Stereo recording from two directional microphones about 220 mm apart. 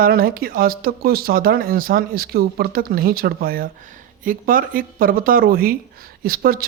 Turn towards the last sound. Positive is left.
turn(degrees=-40)  # may be behind; listen again after turning